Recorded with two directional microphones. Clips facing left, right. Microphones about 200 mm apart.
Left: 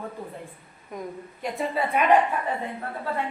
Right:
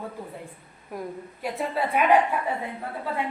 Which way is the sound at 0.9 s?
5° right (ahead or behind).